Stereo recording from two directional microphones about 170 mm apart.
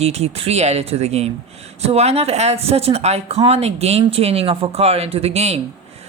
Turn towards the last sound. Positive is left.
turn(degrees=-40)  # may be behind; listen again after turning